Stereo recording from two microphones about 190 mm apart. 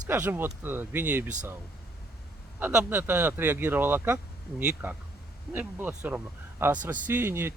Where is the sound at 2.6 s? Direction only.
10° right (ahead or behind).